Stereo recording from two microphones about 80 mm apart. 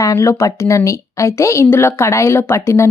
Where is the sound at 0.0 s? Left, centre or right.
Left.